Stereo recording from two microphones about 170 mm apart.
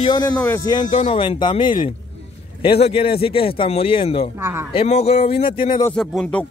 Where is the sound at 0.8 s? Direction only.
50° left (ahead or behind).